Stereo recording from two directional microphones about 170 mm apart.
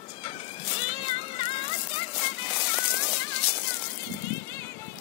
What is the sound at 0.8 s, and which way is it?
Music, 35° left (ahead or behind).